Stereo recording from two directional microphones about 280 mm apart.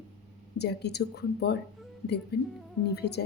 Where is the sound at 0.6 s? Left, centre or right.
Left.